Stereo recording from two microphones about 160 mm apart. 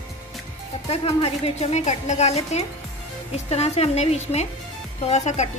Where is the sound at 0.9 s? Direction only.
40° left (ahead or behind).